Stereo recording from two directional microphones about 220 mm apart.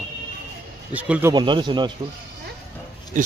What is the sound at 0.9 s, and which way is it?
Speech, 5° right (ahead or behind).